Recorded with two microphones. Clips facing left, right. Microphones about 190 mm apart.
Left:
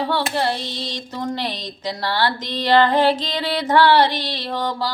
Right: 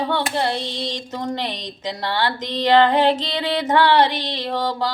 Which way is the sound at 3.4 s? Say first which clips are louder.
Left 2 dB; 15° right (ahead or behind).